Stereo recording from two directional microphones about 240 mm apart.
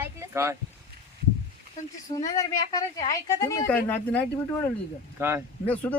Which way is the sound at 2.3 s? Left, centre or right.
Centre.